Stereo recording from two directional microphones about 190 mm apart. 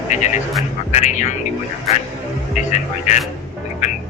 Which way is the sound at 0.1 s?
40° left (ahead or behind).